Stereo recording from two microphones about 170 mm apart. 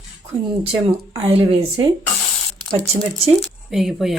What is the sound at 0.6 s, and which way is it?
Speech, 30° right (ahead or behind).